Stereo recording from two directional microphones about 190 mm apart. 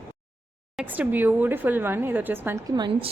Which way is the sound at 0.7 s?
10° right (ahead or behind).